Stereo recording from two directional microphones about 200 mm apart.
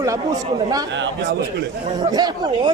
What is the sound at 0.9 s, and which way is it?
Speech, 65° right (ahead or behind).